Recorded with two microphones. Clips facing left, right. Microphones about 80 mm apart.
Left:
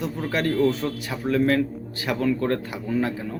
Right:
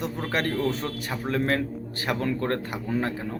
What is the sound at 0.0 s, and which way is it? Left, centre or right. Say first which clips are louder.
A man's voice: left 2 dB; right.